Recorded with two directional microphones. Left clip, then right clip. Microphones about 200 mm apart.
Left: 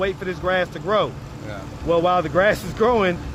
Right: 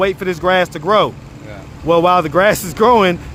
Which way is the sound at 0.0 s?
55° right (ahead or behind).